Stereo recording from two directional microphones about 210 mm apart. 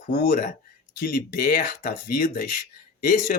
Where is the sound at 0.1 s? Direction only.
45° left (ahead or behind).